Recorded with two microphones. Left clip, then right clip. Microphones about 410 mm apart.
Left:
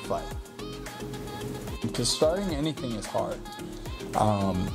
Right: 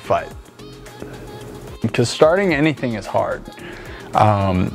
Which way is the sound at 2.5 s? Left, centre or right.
Right.